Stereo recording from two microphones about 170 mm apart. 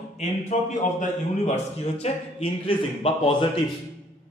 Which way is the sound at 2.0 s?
40° left (ahead or behind).